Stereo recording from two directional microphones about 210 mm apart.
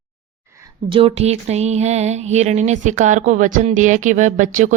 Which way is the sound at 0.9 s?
25° right (ahead or behind).